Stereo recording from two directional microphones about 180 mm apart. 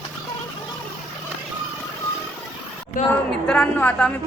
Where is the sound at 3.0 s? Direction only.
50° left (ahead or behind).